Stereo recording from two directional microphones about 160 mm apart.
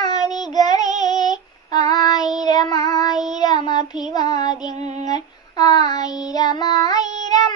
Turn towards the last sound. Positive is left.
turn(degrees=25)  # may be behind; listen again after turning